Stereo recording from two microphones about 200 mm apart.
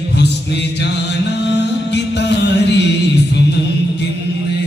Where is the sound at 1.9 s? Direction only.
60° left (ahead or behind).